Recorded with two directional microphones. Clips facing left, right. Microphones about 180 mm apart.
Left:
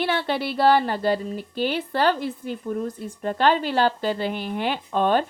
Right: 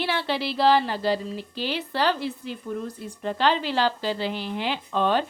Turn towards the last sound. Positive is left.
turn(degrees=50)  # may be behind; listen again after turning